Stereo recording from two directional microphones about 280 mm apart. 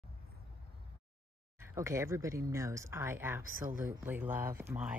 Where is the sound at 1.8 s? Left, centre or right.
Centre.